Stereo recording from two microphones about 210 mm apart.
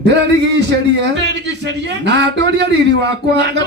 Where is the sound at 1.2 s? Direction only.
55° right (ahead or behind).